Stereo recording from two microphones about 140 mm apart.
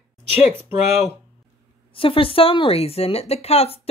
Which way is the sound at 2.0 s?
40° left (ahead or behind).